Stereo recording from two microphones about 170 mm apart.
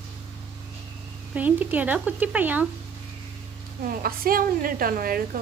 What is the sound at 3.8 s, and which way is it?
A woman's voice, 60° right (ahead or behind).